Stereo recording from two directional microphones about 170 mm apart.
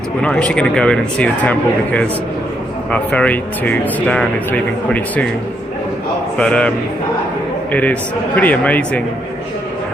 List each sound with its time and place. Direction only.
0.2 s speech: 5° left (ahead or behind)
6.3 s speech: 5° left (ahead or behind)